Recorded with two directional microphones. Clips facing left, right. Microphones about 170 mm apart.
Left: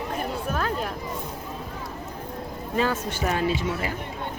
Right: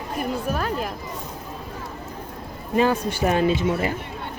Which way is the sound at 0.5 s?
5° right (ahead or behind).